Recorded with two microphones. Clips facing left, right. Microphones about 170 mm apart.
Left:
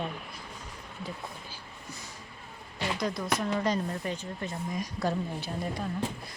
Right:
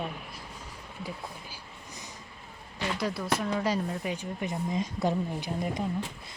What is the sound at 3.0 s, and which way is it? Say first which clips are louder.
Speech: right 1 dB; 5° right (ahead or behind).